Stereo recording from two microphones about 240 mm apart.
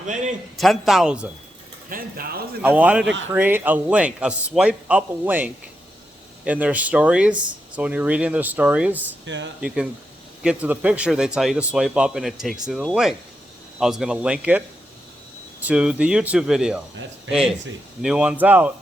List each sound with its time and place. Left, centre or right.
0.5 s speech: centre
1.9 s speech: right
2.6 s speech: centre
9.2 s speech: right
9.6 s speech: centre
15.6 s speech: centre
18.0 s speech: centre